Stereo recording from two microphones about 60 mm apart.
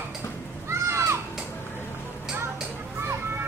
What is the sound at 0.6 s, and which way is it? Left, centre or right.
Music, right.